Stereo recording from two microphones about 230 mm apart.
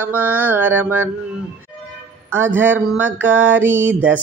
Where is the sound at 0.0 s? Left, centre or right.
Centre.